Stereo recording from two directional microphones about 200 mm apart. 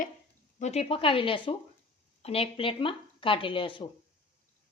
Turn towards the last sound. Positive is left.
turn(degrees=25)  # may be behind; listen again after turning